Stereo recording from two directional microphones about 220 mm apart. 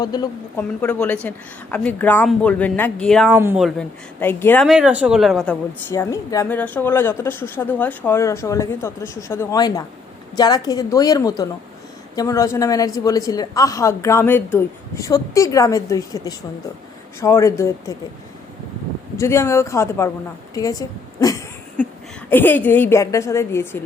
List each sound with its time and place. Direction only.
0.0 s a woman's voice: 20° left (ahead or behind)
0.8 s a woman's voice: 5° left (ahead or behind)
3.3 s speech: 10° right (ahead or behind)
3.8 s speech: 10° left (ahead or behind)
5.9 s a woman's voice: 15° left (ahead or behind)
19.1 s a woman's voice: 10° left (ahead or behind)
20.5 s a sound: 15° left (ahead or behind)
22.3 s a woman's voice: 10° left (ahead or behind)